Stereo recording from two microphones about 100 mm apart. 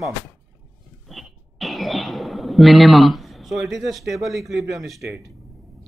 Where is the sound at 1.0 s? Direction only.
Centre (ahead or behind).